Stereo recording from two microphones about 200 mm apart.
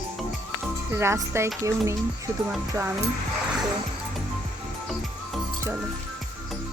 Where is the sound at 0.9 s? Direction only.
10° right (ahead or behind).